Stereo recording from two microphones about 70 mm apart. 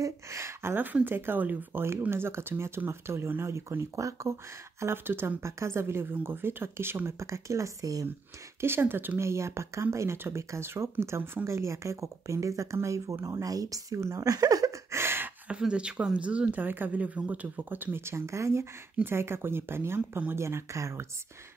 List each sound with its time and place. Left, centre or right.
0.0 s speech: right
8.5 s speech: right
9.2 s speech: right
14.9 s a sound: right
15.6 s speech: centre
17.9 s speech: right